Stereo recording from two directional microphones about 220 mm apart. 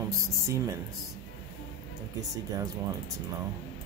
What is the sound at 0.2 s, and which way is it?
Music, 15° right (ahead or behind).